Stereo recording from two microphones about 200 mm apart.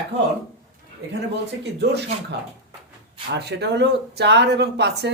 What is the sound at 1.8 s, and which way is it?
Speech, 55° right (ahead or behind).